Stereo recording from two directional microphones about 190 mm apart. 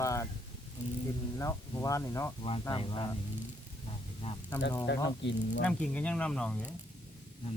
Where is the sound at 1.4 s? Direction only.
15° left (ahead or behind).